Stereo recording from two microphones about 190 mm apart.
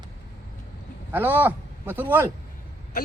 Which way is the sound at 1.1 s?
10° right (ahead or behind).